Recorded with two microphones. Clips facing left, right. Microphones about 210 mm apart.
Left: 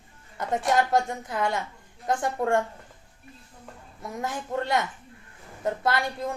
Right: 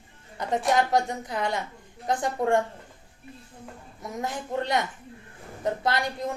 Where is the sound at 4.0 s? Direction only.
20° right (ahead or behind).